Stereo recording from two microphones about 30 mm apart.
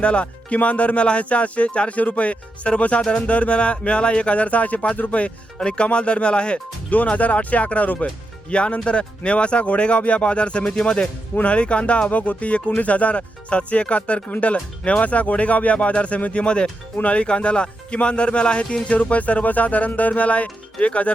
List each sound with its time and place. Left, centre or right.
0.0 s speech: left
5.5 s speech: left
6.9 s speech: left
8.4 s speech: left
10.6 s speech: left
12.1 s speech: left
19.0 s speech: left
20.8 s speech: left